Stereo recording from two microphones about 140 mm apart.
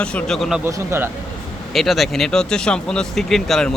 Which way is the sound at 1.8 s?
Centre (ahead or behind).